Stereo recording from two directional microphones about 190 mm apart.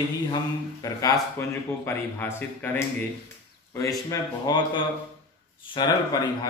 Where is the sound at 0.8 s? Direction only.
20° left (ahead or behind).